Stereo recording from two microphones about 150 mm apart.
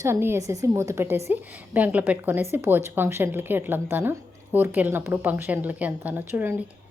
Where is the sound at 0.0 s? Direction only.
15° right (ahead or behind).